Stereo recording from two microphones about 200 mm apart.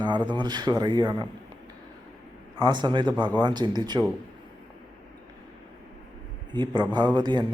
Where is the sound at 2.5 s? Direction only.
20° right (ahead or behind).